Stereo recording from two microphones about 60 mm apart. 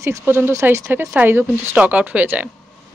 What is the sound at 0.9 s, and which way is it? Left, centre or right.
Speech, right.